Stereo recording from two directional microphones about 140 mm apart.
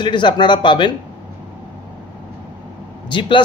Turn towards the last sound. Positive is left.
turn(degrees=35)  # may be behind; listen again after turning